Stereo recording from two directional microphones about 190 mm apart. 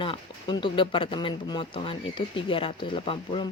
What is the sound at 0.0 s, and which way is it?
Speech, 25° left (ahead or behind).